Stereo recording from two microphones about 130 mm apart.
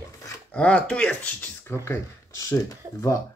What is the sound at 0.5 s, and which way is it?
Speech, 10° left (ahead or behind).